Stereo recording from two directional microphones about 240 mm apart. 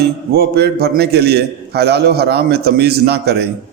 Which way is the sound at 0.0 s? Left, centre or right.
Right.